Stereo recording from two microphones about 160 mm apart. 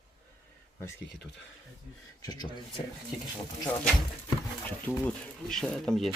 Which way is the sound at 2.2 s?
25° left (ahead or behind).